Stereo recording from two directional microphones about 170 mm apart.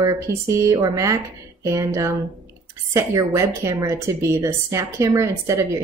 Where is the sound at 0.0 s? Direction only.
20° right (ahead or behind).